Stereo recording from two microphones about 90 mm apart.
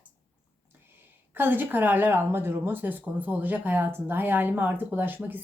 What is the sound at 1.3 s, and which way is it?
Speech, 20° right (ahead or behind).